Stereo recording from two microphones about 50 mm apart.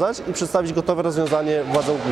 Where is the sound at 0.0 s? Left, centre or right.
Centre.